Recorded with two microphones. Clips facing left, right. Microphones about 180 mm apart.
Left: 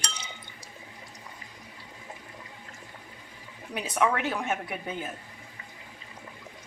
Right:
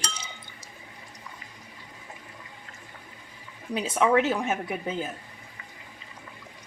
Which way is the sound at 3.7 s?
25° right (ahead or behind).